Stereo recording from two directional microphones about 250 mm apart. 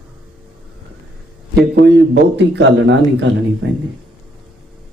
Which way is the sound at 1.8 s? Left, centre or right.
Right.